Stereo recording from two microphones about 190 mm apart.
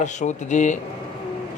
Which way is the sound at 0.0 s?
40° left (ahead or behind).